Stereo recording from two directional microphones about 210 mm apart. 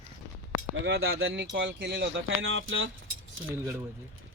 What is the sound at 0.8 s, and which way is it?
Speech, 60° right (ahead or behind).